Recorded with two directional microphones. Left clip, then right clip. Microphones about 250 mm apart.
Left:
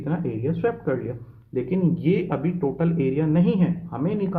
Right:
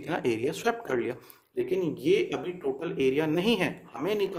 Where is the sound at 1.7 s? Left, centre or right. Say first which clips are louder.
Left 1 dB; centre.